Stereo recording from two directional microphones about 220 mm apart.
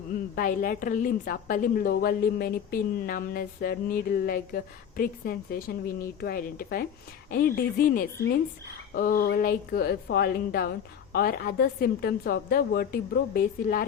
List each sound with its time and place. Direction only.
0.3 s a woman's voice: 40° left (ahead or behind)